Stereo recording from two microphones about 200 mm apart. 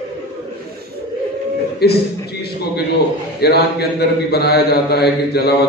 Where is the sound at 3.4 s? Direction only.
55° left (ahead or behind).